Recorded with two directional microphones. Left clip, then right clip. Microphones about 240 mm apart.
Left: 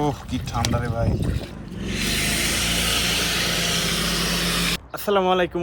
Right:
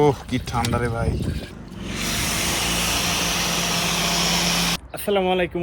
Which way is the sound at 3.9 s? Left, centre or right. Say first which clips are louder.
Right 2 dB; right.